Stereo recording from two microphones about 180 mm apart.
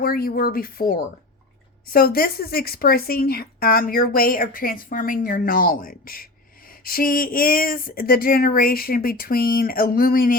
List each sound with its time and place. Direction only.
0.0 s speech: 55° left (ahead or behind)